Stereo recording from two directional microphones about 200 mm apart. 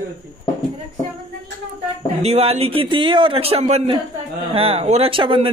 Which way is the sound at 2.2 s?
30° right (ahead or behind).